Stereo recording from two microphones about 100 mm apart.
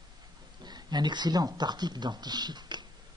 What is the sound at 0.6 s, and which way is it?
Speech, 45° right (ahead or behind).